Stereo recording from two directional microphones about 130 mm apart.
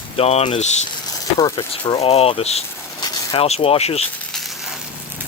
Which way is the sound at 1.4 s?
20° left (ahead or behind).